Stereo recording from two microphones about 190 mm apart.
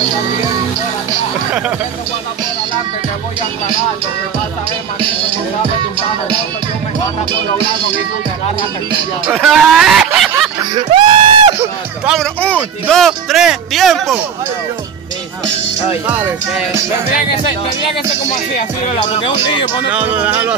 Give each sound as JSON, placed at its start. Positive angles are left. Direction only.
{"t": 9.3, "sound": "speech", "side_deg": 0}
{"t": 10.7, "sound": "speech", "side_deg": -25}
{"t": 12.1, "sound": "speech", "side_deg": 5}
{"t": 19.9, "sound": "speech", "side_deg": -10}